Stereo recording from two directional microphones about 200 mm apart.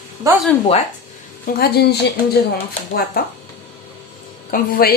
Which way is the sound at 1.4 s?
50° left (ahead or behind).